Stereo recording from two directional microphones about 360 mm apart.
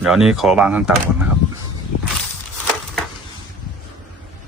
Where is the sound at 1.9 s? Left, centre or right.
Left.